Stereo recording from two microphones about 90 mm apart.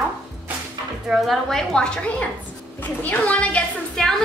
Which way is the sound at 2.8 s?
20° left (ahead or behind).